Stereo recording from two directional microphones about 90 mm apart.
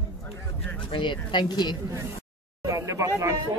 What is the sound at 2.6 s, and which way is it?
Speech, 35° right (ahead or behind).